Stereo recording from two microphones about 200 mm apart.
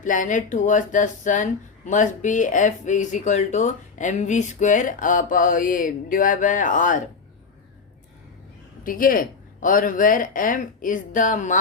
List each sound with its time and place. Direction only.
0.0 s speech: 40° left (ahead or behind)
8.8 s speech: 45° left (ahead or behind)